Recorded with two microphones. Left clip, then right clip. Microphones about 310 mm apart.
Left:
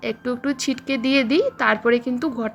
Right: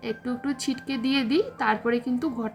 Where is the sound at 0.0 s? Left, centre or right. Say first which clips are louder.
Left 6 dB; centre.